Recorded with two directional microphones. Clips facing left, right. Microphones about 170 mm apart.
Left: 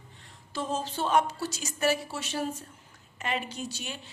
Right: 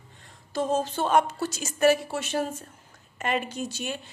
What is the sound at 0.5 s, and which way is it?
Speech, 45° right (ahead or behind).